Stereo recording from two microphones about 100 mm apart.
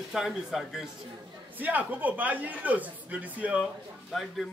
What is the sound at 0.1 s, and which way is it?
Speech, 5° right (ahead or behind).